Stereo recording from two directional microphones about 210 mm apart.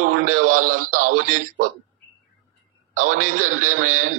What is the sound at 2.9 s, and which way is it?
Speech, 40° right (ahead or behind).